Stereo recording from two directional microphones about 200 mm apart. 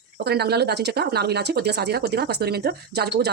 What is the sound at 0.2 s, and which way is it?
Speech, 50° right (ahead or behind).